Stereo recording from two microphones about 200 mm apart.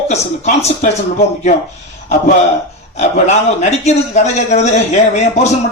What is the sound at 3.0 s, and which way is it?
A man's voice, 35° left (ahead or behind).